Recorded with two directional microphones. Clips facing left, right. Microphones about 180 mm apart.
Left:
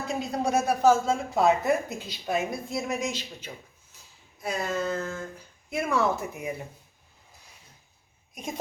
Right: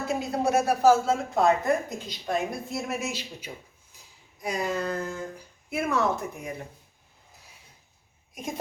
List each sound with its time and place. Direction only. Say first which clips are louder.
0.1 s speech: right 2 dB; 5° right (ahead or behind)
4.4 s a sound: right 1 dB; 15° right (ahead or behind)
5.7 s speech: even; 5° right (ahead or behind)